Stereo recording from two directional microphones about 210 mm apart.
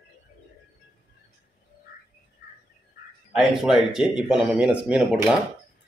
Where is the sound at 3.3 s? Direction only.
Centre (ahead or behind).